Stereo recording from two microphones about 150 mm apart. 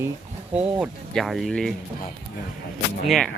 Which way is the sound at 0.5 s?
10° right (ahead or behind).